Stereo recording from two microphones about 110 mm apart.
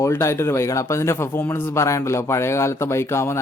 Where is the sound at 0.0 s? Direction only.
25° left (ahead or behind).